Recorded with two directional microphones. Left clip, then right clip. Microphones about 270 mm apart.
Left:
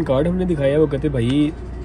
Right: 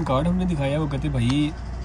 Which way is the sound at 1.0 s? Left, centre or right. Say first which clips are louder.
Left 6 dB; centre.